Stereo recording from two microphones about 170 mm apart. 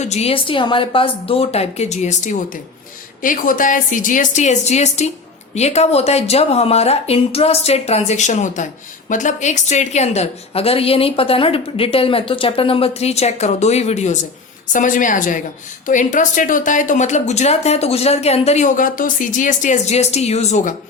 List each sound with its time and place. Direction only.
0.0 s a woman's voice: 40° left (ahead or behind)